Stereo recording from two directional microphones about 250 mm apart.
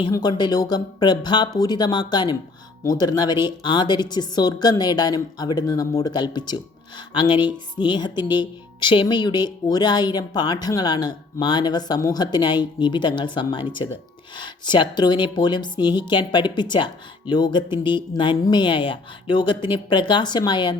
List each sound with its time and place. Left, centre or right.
0.0 s speech: centre